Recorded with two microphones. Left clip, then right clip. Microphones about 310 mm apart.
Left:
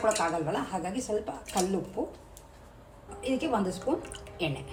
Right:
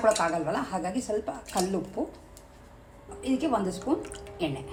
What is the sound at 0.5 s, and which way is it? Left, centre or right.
Speech, right.